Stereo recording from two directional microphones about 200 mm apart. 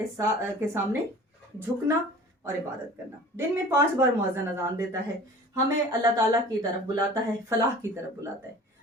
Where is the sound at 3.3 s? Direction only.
10° right (ahead or behind).